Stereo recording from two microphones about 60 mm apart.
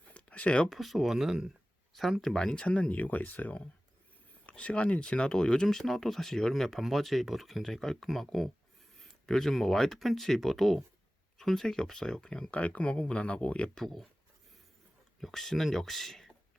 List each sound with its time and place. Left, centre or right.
0.1 s a sound: left
0.7 s speech: centre; by 13.7 s left
13.7 s speech: centre
15.2 s speech: centre